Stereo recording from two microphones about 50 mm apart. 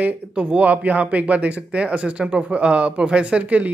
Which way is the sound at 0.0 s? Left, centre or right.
Right.